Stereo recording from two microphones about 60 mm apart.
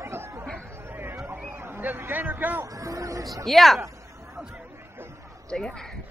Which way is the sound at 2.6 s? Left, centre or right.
Right.